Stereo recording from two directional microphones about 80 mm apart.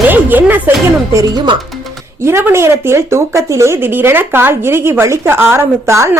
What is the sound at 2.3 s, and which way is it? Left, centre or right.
Speech, right.